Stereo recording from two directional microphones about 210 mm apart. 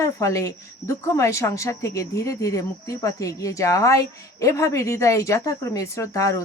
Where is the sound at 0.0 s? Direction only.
15° left (ahead or behind).